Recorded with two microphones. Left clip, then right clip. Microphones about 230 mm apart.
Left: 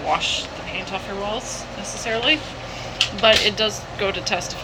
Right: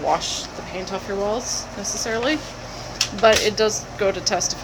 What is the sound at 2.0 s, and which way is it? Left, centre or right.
A woman's voice, right.